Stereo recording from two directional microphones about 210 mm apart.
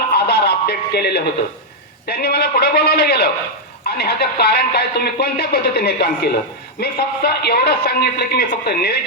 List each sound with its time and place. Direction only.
0.1 s music: 50° left (ahead or behind)
2.0 s speech: 50° left (ahead or behind)